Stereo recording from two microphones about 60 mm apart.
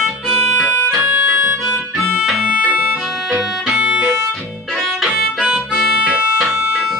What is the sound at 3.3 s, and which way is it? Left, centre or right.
Music, centre.